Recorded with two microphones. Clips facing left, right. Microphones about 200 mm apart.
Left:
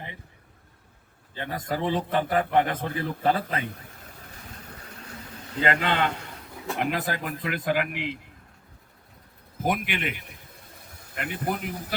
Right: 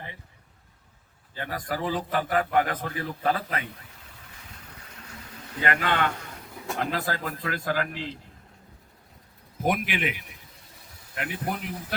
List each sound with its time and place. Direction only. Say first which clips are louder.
1.4 s a man's voice: left 2 dB; 25° left (ahead or behind)
5.6 s a man's voice: left 1 dB; 25° left (ahead or behind)
9.6 s speech: right 1 dB; centre (ahead or behind)